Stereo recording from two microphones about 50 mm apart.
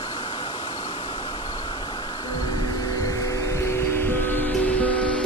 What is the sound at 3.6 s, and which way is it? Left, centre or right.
Music, left.